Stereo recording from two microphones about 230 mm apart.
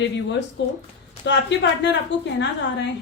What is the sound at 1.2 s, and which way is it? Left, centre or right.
Speech, left.